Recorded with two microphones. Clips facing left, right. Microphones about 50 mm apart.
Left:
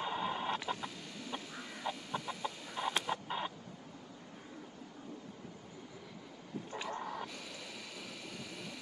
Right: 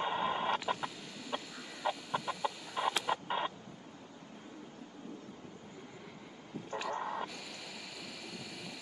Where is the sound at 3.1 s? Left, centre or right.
Right.